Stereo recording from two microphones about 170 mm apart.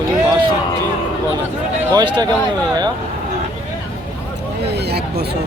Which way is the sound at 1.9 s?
25° right (ahead or behind).